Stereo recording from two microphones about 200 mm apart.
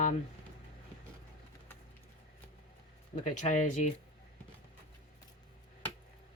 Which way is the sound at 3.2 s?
35° left (ahead or behind).